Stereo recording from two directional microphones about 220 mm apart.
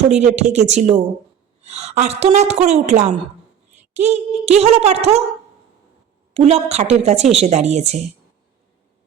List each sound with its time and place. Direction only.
0.1 s a woman's voice: 30° right (ahead or behind)
6.3 s a woman's voice: 30° right (ahead or behind)